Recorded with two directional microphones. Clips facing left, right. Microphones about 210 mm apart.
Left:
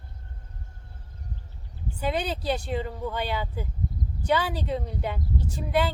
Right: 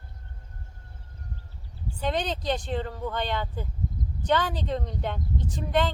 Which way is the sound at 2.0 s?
10° left (ahead or behind).